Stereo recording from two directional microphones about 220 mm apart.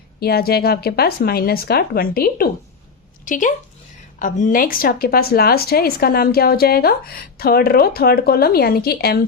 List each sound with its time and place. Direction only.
0.2 s a woman's voice: 45° left (ahead or behind)